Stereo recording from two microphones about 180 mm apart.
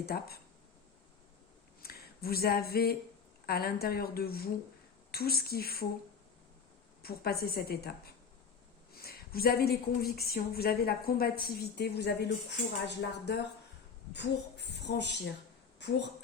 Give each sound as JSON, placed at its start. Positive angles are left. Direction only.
{"t": 0.0, "sound": "speech", "side_deg": 60}
{"t": 1.8, "sound": "speech", "side_deg": 55}
{"t": 7.0, "sound": "a woman's voice", "side_deg": 55}